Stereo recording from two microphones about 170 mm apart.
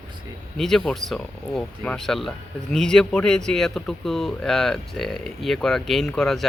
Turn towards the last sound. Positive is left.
turn(degrees=0)  # may be behind; listen again after turning